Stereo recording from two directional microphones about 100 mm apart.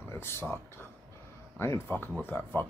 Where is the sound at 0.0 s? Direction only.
25° left (ahead or behind).